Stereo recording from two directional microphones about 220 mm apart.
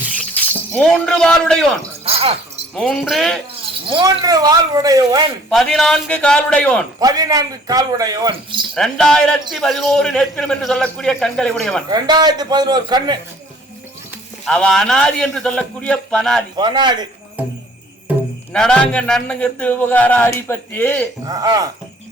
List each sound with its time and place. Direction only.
0.3 s speech: 5° left (ahead or behind)
2.0 s a sound: 25° right (ahead or behind)
2.7 s a man's voice: centre (ahead or behind)
3.8 s a man's voice: 20° right (ahead or behind)
5.5 s a man's voice: centre (ahead or behind)
7.0 s a man's voice: 15° right (ahead or behind)
8.7 s a man's voice: 5° left (ahead or behind)
11.9 s a man's voice: 20° right (ahead or behind)
14.4 s a man's voice: 5° left (ahead or behind)
16.6 s a man's voice: 20° right (ahead or behind)
17.4 s a man's voice: 5° right (ahead or behind)
18.5 s a man's voice: 5° left (ahead or behind)
21.2 s a man's voice: 15° right (ahead or behind)